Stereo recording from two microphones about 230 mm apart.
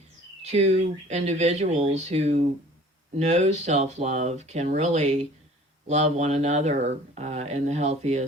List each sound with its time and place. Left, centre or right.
0.4 s speech: right